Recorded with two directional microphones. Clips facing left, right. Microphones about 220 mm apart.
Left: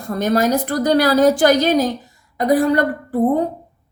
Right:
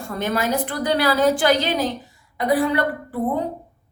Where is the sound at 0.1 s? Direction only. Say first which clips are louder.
Left 6 dB; 40° left (ahead or behind).